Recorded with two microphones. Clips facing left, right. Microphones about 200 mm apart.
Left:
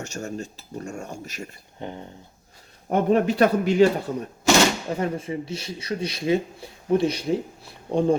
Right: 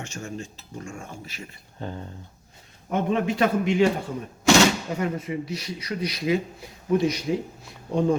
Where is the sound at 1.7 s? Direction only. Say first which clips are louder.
Even; 20° left (ahead or behind).